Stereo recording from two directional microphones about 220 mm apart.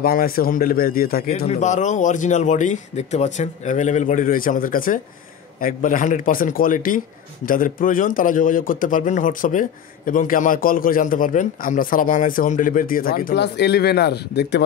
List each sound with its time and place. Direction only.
0.0 s a man's voice: 40° left (ahead or behind)